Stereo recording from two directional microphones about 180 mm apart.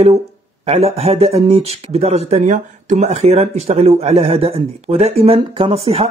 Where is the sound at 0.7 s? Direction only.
35° right (ahead or behind).